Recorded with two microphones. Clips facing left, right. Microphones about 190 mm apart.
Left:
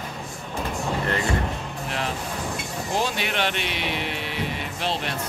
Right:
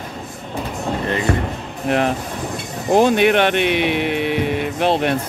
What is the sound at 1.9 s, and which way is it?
Speech, 60° right (ahead or behind).